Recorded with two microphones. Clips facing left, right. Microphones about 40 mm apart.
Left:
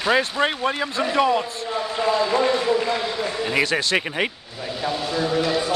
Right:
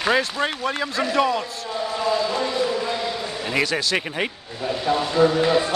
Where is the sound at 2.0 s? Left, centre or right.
Left.